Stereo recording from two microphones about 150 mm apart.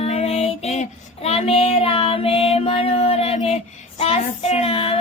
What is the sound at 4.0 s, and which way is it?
Child singing, 40° left (ahead or behind).